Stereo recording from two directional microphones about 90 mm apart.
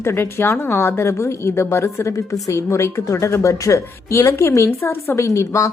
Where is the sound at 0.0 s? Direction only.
25° left (ahead or behind).